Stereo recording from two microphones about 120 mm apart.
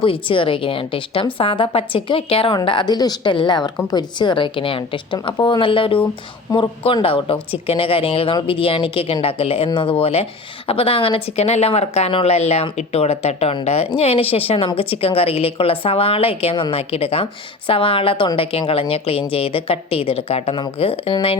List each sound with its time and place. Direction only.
0.0 s a woman's voice: 45° left (ahead or behind)
2.6 s a woman's voice: 40° left (ahead or behind)